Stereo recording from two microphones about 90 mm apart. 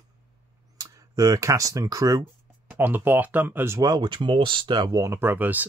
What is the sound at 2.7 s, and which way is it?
Speech, 20° right (ahead or behind).